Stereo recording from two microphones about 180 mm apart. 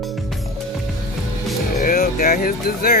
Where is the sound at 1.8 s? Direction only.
55° left (ahead or behind).